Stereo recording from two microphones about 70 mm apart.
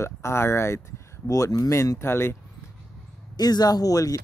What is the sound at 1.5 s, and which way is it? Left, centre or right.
Speech, left.